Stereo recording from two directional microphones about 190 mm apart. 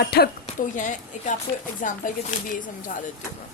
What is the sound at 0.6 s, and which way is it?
Speech, 40° left (ahead or behind).